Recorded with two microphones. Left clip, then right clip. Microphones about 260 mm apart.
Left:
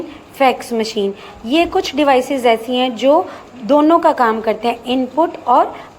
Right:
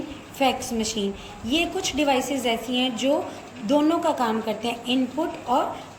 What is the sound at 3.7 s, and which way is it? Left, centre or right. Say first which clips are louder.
Speech: left 10 dB; left.